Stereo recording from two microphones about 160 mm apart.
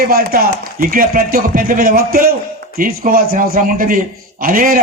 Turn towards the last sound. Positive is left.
turn(degrees=-60)  # may be behind; listen again after turning